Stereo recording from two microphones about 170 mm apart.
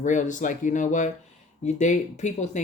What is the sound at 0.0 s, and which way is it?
Speech, 45° left (ahead or behind).